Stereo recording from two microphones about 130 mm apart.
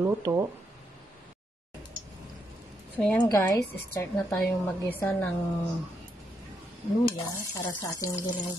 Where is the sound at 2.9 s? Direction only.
10° left (ahead or behind).